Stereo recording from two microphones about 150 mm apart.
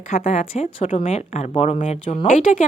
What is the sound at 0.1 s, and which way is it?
Speech, 45° left (ahead or behind).